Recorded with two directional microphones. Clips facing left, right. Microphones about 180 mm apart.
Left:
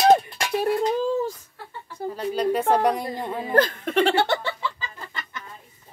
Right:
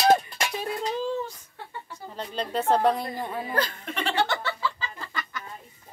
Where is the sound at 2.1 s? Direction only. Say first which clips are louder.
Left 6 dB; 10° left (ahead or behind).